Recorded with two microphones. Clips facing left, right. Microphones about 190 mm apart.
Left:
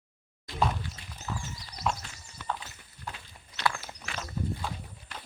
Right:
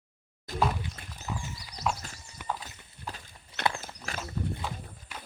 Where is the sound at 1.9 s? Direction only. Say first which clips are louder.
Even; centre (ahead or behind).